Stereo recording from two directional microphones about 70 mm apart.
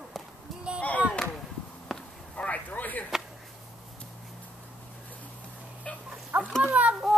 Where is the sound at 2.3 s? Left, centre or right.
Centre.